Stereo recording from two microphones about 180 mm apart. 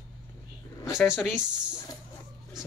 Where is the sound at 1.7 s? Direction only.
20° left (ahead or behind).